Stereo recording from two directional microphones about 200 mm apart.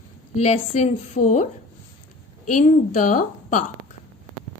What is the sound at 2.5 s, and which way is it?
A woman's voice, 40° left (ahead or behind).